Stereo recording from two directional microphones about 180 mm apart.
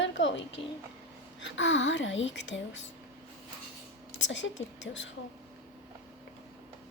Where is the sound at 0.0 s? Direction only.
90° left.